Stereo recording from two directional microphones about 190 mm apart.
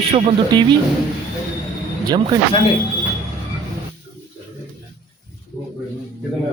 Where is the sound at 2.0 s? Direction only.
20° right (ahead or behind).